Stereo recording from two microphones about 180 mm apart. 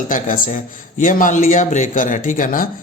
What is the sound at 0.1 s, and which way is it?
A man's voice, 50° left (ahead or behind).